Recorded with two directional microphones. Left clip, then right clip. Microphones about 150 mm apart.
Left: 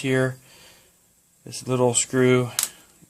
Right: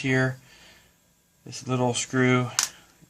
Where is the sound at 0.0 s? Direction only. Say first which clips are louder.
Left 2 dB; 80° left.